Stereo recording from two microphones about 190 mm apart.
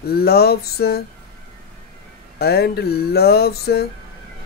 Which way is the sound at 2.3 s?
55° left (ahead or behind).